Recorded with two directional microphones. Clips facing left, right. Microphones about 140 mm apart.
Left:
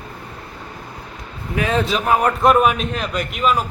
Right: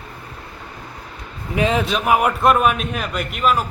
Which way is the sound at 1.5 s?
20° right (ahead or behind).